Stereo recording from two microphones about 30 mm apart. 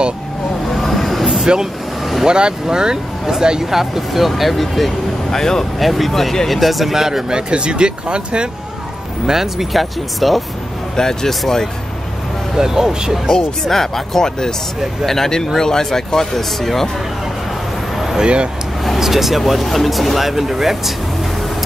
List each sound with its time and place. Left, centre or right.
0.7 s vehicle: centre
1.4 s speech: right
3.7 s speech: centre
5.3 s speech: centre
5.8 s speech: centre
7.0 s speech: centre
7.2 s speech: right
9.2 s speech: centre
9.7 s speech: centre
11.0 s speech: centre
12.5 s speech: centre
13.3 s speech: centre
18.2 s speech: right
18.9 s speech: centre